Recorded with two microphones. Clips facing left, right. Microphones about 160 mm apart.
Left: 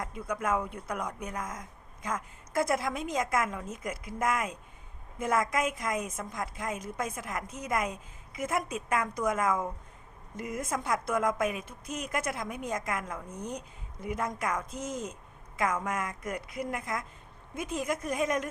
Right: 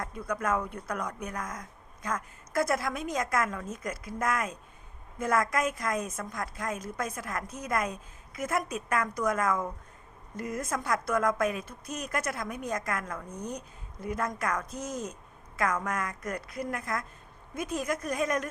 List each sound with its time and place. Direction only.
0.0 s a woman's voice: 15° left (ahead or behind)